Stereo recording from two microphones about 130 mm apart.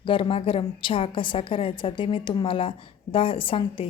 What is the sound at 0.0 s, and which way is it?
A woman's voice, 40° left (ahead or behind).